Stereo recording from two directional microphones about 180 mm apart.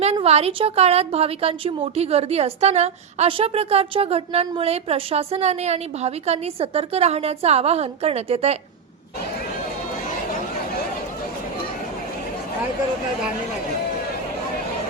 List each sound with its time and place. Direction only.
0.0 s a woman's voice: 35° right (ahead or behind)